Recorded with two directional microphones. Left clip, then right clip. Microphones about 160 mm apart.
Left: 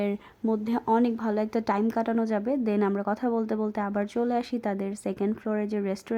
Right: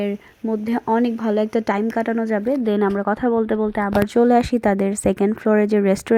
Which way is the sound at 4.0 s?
35° right (ahead or behind).